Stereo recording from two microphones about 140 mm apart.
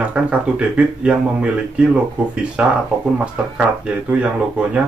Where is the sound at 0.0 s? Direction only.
10° right (ahead or behind).